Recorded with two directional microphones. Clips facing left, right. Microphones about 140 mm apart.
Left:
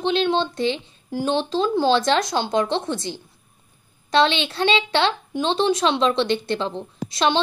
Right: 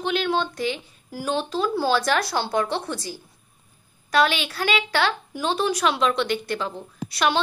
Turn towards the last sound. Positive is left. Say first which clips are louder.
# left 2 dB
turn(degrees=25)  # may be behind; listen again after turning